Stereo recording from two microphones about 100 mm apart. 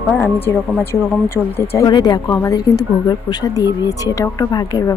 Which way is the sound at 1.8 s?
40° left (ahead or behind).